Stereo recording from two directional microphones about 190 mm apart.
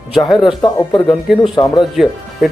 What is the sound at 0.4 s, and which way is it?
Speech, 25° left (ahead or behind).